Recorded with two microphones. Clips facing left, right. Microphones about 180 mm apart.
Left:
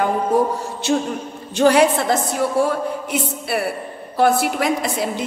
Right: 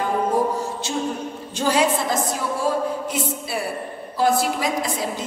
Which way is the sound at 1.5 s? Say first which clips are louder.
Left 6 dB; 65° left (ahead or behind).